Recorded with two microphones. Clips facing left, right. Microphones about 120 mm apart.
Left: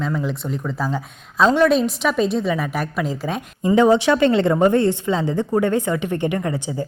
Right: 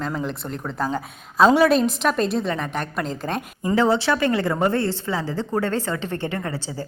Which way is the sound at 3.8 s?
15° left (ahead or behind).